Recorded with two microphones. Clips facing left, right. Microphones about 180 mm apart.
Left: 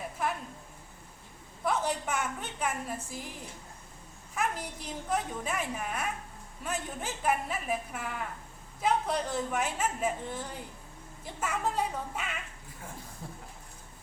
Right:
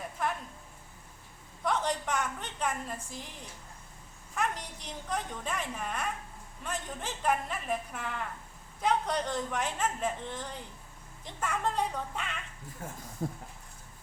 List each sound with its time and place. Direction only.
0.2 s a sound: 5° left (ahead or behind)
1.6 s a woman's voice: 5° left (ahead or behind)
4.4 s a man's voice: 5° left (ahead or behind)
13.2 s speech: 45° right (ahead or behind)